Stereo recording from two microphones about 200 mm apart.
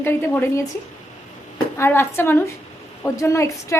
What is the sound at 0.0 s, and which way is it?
Speech, 10° left (ahead or behind).